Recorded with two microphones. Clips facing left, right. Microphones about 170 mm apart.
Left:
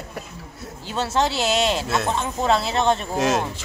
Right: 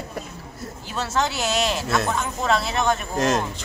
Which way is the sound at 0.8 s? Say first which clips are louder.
Left 3 dB; 30° left (ahead or behind).